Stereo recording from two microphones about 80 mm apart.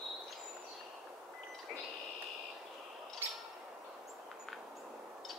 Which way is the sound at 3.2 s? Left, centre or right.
Right.